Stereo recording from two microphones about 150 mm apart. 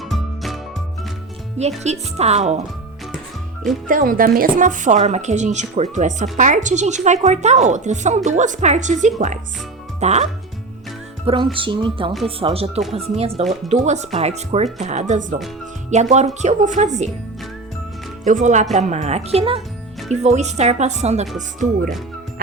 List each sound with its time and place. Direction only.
0.1 s music: centre (ahead or behind)
1.8 s a woman's voice: 45° right (ahead or behind)
3.8 s a woman's voice: 65° right (ahead or behind); by 10.2 s 50° right (ahead or behind)
11.5 s a woman's voice: 35° right (ahead or behind); by 17.1 s 50° right (ahead or behind)
18.3 s a woman's voice: 55° right (ahead or behind)